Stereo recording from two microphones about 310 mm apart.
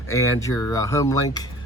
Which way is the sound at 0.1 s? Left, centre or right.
Centre.